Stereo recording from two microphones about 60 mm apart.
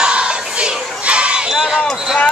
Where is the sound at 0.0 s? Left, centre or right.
Centre.